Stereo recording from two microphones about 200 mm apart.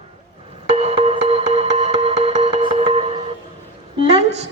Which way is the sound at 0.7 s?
30° right (ahead or behind).